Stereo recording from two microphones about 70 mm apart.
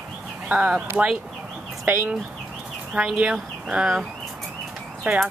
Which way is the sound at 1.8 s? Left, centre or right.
Right.